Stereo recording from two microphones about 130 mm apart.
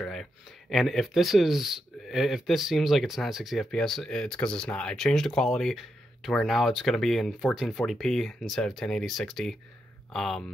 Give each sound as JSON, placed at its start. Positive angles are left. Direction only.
{"t": 0.0, "sound": "speech", "side_deg": 0}